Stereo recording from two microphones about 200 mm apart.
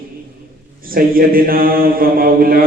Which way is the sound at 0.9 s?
45° right (ahead or behind).